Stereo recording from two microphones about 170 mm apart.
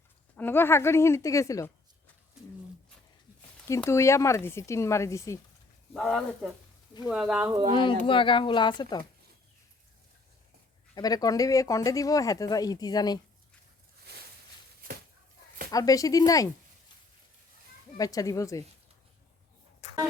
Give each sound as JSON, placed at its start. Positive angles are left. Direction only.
{"t": 0.3, "sound": "speech", "side_deg": 10}
{"t": 3.8, "sound": "speech", "side_deg": 15}
{"t": 5.9, "sound": "speech", "side_deg": 0}
{"t": 7.5, "sound": "speech", "side_deg": -25}
{"t": 8.0, "sound": "speech", "side_deg": 30}
{"t": 10.9, "sound": "speech", "side_deg": 20}
{"t": 14.1, "sound": "a sound", "side_deg": -75}
{"t": 15.7, "sound": "speech", "side_deg": 20}
{"t": 17.9, "sound": "speech", "side_deg": 20}